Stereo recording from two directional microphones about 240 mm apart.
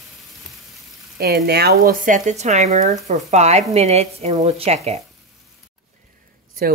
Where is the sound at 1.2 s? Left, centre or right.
Right.